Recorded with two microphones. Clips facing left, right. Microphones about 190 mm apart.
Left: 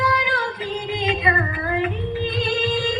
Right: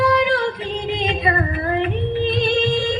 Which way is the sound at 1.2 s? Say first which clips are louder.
Right 2 dB; 30° right (ahead or behind).